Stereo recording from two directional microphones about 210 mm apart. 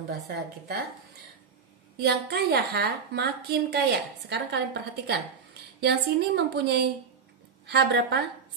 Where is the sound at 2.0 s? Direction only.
50° right (ahead or behind).